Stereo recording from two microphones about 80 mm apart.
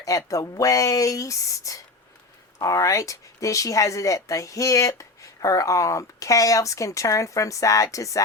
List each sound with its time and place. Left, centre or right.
0.0 s speech: left